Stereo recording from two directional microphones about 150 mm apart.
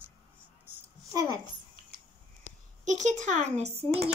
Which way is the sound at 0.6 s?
15° right (ahead or behind).